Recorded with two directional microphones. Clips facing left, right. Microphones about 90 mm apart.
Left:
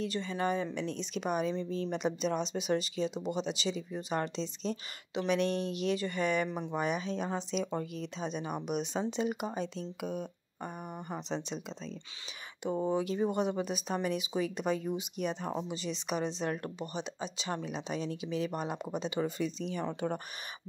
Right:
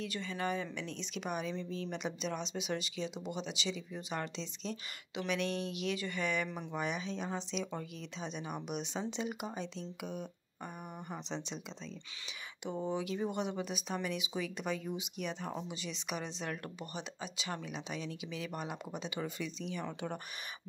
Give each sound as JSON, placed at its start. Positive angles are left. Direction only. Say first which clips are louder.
{"t": 0.0, "sound": "speech", "louder": "left 5 dB", "side_deg": 30}
{"t": 12.6, "sound": "speech", "louder": "left 6 dB", "side_deg": 40}